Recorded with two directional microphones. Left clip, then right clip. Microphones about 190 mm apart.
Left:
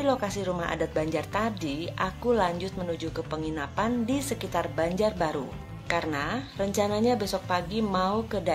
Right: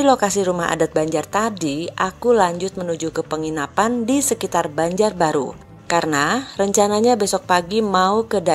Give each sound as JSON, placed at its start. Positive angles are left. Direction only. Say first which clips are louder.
{"t": 0.0, "sound": "a woman's voice", "louder": "right 11 dB", "side_deg": -50}